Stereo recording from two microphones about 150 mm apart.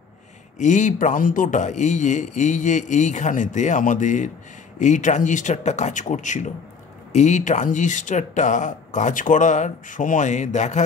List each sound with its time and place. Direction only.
0.6 s speech: 55° left (ahead or behind)